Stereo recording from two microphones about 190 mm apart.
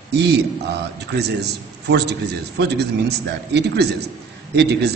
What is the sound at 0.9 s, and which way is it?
A man's voice, 60° right (ahead or behind).